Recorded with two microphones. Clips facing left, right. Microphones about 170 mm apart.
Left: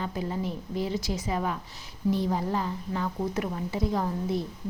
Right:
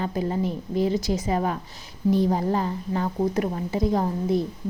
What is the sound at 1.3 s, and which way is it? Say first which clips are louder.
A woman's voice: right 5 dB; 40° right (ahead or behind).